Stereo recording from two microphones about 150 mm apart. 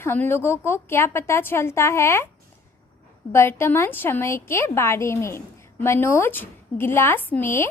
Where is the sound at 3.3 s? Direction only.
15° left (ahead or behind).